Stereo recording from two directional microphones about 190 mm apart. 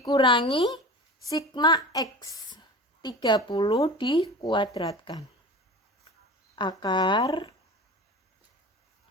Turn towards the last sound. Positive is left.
turn(degrees=20)  # may be behind; listen again after turning